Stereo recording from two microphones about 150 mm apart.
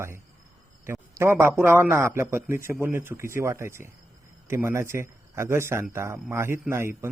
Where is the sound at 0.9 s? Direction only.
15° right (ahead or behind).